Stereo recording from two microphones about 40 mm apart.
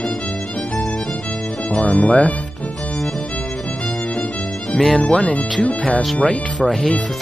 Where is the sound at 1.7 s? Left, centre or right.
Left.